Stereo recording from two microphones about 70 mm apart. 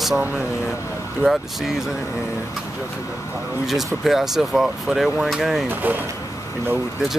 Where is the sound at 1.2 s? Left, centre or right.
Right.